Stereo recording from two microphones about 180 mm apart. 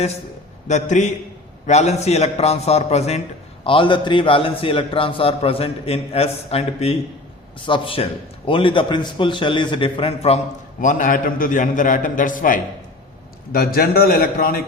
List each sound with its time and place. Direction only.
0.7 s a man's voice: 40° left (ahead or behind)